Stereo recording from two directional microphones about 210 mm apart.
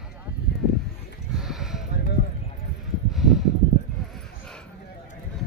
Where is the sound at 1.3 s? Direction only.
Centre (ahead or behind).